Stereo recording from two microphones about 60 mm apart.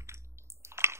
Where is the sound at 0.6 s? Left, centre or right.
Right.